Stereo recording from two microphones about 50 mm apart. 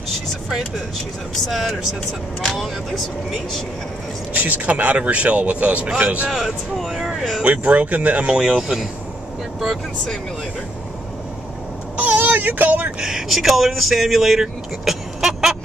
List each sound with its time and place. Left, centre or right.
1.5 s speech: centre
4.4 s speech: right
6.2 s speech: centre
7.4 s speech: right
8.3 s speech: centre
12.0 s speech: right
13.0 s speech: centre